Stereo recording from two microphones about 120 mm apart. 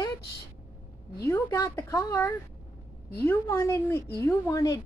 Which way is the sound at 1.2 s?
25° left (ahead or behind).